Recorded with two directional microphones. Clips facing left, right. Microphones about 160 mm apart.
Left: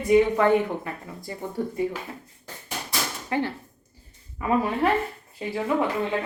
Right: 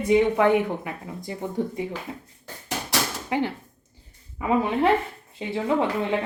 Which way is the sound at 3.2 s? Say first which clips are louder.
Right 1 dB; 15° right (ahead or behind).